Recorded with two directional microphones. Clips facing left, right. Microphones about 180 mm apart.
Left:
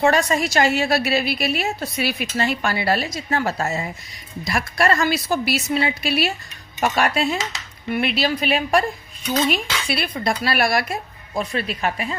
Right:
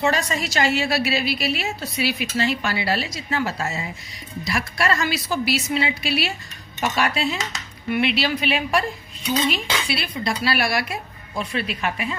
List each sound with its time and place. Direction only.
0.0 s a woman's voice: 50° left (ahead or behind)
9.9 s a woman's voice: 50° left (ahead or behind)